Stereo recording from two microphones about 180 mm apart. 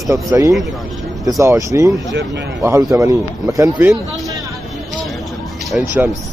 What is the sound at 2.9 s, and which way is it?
Speech, 20° right (ahead or behind).